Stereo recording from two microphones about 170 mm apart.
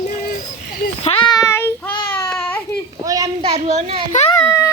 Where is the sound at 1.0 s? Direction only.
30° left (ahead or behind).